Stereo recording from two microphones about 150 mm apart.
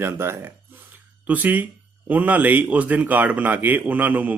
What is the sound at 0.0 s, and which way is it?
Speech, 15° right (ahead or behind).